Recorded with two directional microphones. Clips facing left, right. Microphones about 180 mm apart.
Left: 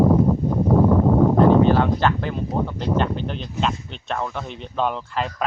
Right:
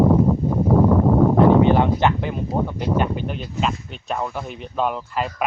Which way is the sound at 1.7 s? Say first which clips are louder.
Right 1 dB; 20° right (ahead or behind).